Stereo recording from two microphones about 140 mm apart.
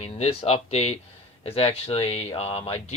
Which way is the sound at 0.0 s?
45° left (ahead or behind).